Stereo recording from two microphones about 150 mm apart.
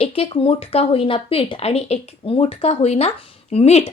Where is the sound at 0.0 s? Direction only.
40° left (ahead or behind).